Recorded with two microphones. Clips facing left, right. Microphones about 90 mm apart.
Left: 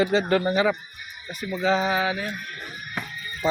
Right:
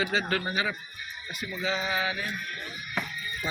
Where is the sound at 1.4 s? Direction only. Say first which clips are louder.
Left 8 dB; 45° left (ahead or behind).